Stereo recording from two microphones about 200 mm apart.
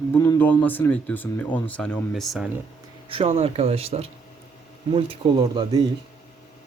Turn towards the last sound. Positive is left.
turn(degrees=-25)  # may be behind; listen again after turning